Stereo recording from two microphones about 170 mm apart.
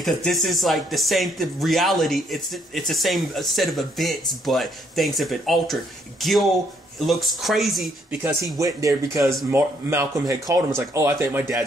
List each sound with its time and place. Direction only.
0.0 s speech: centre (ahead or behind)
8.2 s speech: 15° right (ahead or behind)